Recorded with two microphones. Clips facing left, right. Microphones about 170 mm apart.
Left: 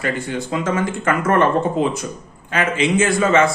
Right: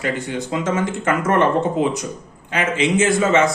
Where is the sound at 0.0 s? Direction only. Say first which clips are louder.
Even; 20° right (ahead or behind).